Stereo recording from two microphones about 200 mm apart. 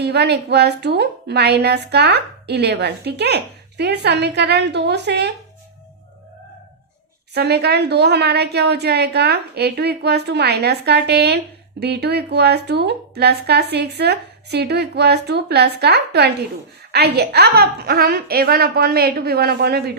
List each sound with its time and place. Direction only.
0.0 s a woman's voice: 55° right (ahead or behind)
7.3 s a woman's voice: 55° right (ahead or behind)